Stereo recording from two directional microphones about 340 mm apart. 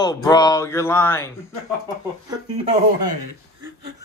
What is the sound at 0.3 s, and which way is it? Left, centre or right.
Speech, centre.